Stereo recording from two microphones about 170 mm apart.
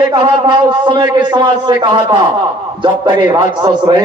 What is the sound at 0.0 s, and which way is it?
A man's voice, 25° right (ahead or behind).